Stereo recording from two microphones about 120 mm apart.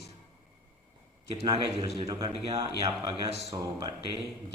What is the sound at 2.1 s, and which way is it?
Speech, 30° right (ahead or behind).